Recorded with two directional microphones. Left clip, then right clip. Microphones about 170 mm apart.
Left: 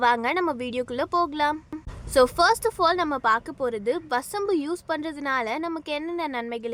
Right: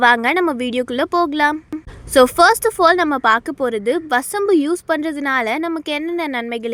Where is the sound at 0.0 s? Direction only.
25° right (ahead or behind).